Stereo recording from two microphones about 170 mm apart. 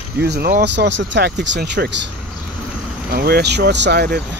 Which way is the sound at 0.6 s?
90° right.